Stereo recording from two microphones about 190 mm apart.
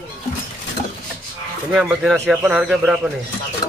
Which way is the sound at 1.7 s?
5° right (ahead or behind).